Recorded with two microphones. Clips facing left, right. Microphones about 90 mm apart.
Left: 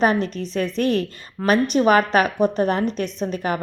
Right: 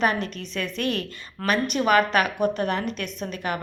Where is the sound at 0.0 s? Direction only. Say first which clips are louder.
Left 5 dB; 40° left (ahead or behind).